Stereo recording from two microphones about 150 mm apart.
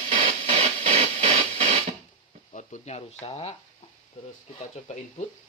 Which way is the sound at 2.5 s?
50° left (ahead or behind).